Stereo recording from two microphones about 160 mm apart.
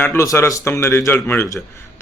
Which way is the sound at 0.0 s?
15° left (ahead or behind).